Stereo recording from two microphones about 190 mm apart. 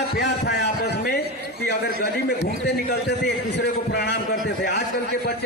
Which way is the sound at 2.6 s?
60° left (ahead or behind).